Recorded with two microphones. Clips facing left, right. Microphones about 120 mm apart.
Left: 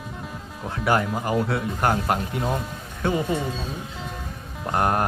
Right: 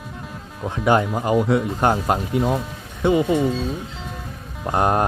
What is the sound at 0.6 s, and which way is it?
Speech, 20° right (ahead or behind).